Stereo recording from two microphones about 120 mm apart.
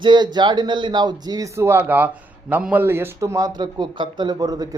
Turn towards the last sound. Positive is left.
turn(degrees=-30)  # may be behind; listen again after turning